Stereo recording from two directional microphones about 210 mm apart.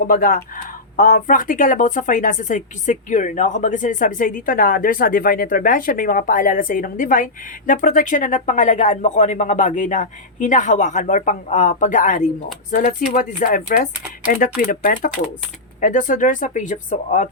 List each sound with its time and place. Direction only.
0.0 s speech: 40° left (ahead or behind)